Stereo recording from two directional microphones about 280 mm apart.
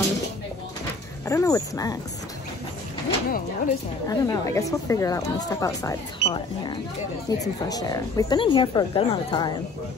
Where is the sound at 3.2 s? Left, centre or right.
Left.